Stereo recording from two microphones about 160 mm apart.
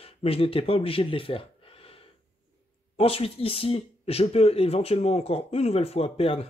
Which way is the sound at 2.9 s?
35° left (ahead or behind).